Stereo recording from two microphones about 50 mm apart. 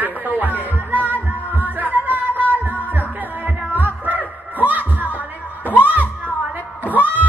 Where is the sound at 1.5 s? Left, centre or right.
Right.